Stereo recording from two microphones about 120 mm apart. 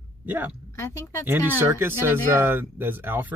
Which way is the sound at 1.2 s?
20° right (ahead or behind).